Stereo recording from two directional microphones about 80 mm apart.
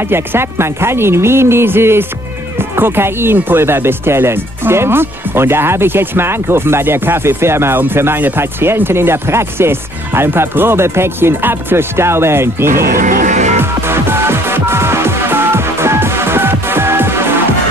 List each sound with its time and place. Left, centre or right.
0.1 s speech: right
13.6 s music: right